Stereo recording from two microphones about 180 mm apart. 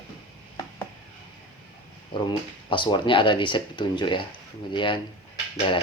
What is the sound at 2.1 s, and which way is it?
Speech, 25° left (ahead or behind).